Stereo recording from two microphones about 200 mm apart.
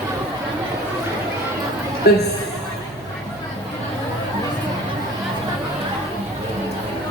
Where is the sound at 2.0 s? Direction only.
55° left (ahead or behind).